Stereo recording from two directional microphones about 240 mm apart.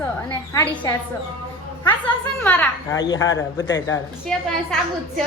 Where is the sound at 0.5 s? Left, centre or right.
Centre.